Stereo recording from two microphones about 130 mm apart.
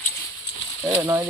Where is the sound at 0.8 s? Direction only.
20° right (ahead or behind).